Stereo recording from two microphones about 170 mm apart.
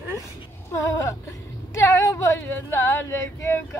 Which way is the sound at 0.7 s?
20° left (ahead or behind).